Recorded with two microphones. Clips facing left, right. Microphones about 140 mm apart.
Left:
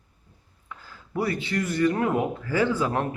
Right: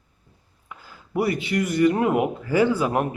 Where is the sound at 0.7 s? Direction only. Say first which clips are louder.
Right 4 dB; 10° right (ahead or behind).